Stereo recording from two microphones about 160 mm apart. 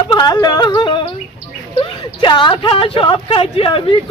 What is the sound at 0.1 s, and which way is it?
Speech, 25° left (ahead or behind).